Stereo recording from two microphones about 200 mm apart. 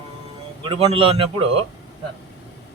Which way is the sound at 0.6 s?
25° right (ahead or behind).